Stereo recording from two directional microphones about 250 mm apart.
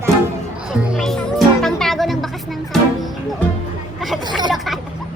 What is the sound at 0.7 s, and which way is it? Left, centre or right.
Music, centre.